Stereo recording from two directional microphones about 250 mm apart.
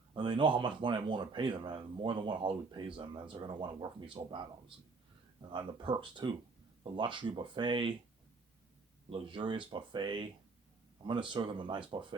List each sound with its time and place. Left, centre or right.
0.1 s speech: centre
5.5 s speech: centre
9.0 s speech: centre